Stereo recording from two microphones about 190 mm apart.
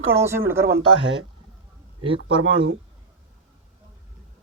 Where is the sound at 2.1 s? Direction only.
80° right.